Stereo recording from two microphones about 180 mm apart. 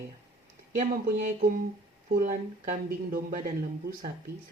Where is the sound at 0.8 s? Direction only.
50° right (ahead or behind).